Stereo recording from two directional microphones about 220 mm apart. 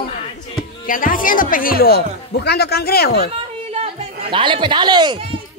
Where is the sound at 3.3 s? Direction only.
25° right (ahead or behind).